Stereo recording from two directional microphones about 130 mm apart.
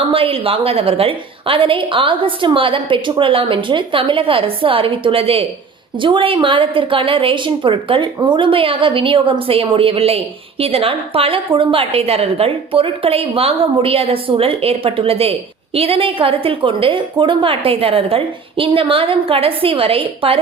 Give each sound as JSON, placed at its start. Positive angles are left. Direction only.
{"t": 0.1, "sound": "a woman's voice", "side_deg": -45}